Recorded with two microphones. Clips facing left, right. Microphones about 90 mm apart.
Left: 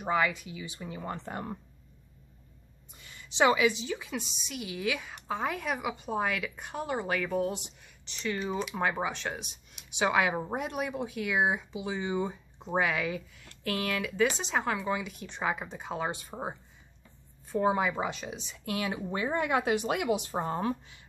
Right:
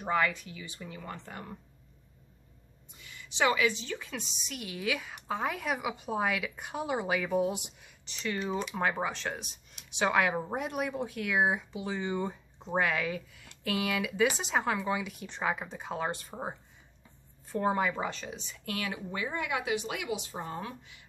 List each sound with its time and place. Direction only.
0.0 s speech: 5° left (ahead or behind); by 1.6 s 30° left (ahead or behind)
3.1 s a woman's voice: 30° left (ahead or behind)